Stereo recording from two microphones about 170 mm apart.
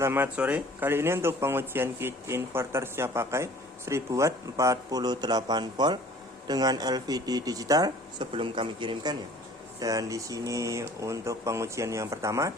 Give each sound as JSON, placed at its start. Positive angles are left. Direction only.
{"t": 0.0, "sound": "a man's voice", "side_deg": -10}